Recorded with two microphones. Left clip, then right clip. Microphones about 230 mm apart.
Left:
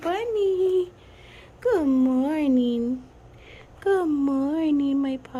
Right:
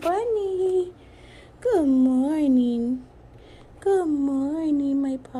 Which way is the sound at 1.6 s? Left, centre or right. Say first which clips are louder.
Right 1 dB; centre.